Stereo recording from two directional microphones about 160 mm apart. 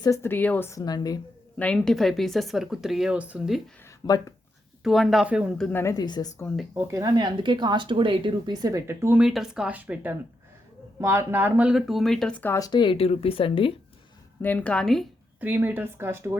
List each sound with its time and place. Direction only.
0.0 s speech: 15° left (ahead or behind)
1.5 s speech: 5° left (ahead or behind)
4.0 s speech: 20° left (ahead or behind)
4.8 s speech: centre (ahead or behind)
5.6 s speech: 15° left (ahead or behind)
6.7 s speech: 20° right (ahead or behind); by 12.5 s 10° left (ahead or behind)
12.5 s speech: 25° left (ahead or behind)
14.4 s a woman's voice: 10° left (ahead or behind)
15.4 s speech: 10° right (ahead or behind)